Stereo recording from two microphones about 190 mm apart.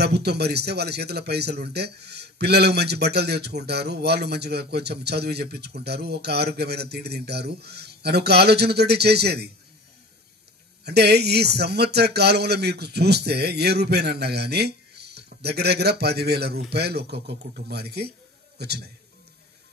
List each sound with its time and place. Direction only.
0.0 s speech: 60° right (ahead or behind)
10.9 s speech: 60° right (ahead or behind)